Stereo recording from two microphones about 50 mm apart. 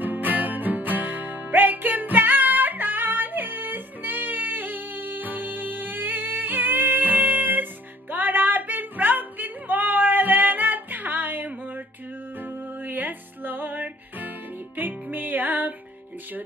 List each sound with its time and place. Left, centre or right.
0.0 s music: right